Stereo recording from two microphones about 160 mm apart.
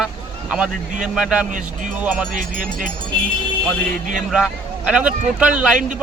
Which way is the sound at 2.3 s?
55° right (ahead or behind).